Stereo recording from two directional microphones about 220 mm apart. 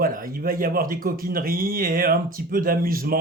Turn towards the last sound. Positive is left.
turn(degrees=-40)  # may be behind; listen again after turning